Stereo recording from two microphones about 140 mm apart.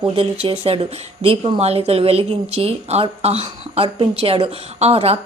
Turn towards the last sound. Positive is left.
turn(degrees=-45)  # may be behind; listen again after turning